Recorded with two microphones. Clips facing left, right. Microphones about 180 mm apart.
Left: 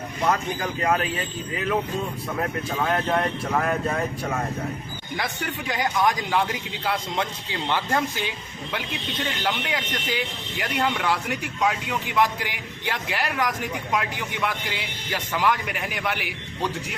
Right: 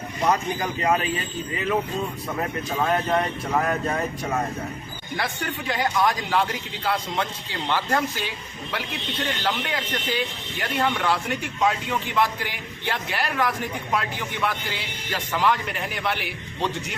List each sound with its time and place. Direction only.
0.3 s speech: 5° right (ahead or behind)
5.1 s speech: 10° left (ahead or behind)
9.4 s speech: 10° left (ahead or behind)